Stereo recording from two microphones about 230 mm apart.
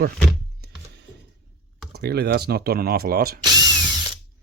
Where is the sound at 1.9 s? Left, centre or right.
Right.